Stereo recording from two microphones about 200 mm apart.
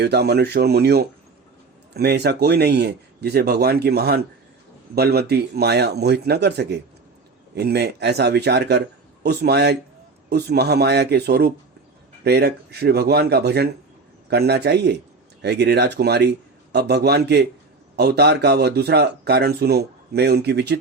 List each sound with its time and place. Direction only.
0.0 s speech: 55° right (ahead or behind)